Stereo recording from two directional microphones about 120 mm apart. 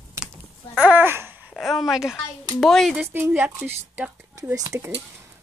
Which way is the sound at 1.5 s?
Centre (ahead or behind).